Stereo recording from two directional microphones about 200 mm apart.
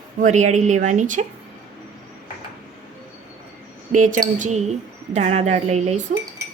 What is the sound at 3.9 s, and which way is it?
A woman's voice, 40° right (ahead or behind).